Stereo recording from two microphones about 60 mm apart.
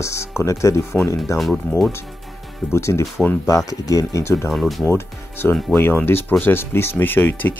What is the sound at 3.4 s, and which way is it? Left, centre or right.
Speech, left.